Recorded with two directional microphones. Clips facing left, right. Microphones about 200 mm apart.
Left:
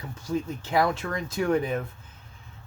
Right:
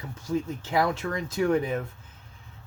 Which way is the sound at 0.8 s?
20° right (ahead or behind).